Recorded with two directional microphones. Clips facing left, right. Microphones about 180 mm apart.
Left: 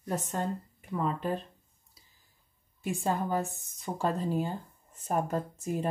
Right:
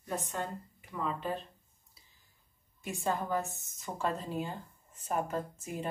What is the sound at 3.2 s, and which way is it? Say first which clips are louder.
Speech: left 3 dB; 30° left (ahead or behind).